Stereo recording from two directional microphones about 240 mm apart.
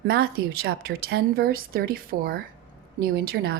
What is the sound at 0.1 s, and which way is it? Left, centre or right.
A woman's voice, right.